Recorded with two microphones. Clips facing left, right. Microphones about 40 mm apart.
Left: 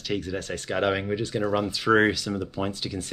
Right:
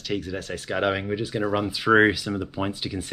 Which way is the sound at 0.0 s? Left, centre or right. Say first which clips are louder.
Even; centre.